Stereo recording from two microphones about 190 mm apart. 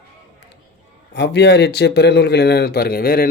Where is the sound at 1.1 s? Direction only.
65° left (ahead or behind).